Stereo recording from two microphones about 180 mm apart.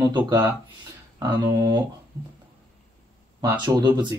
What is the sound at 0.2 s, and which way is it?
Speech, 20° right (ahead or behind).